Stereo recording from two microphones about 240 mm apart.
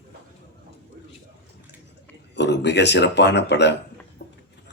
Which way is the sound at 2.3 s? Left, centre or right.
Left.